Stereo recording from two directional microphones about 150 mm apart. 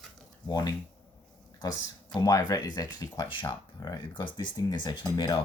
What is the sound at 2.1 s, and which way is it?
Speech, 25° left (ahead or behind).